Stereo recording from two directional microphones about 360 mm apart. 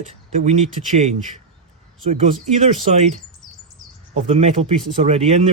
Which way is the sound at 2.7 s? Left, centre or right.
Centre.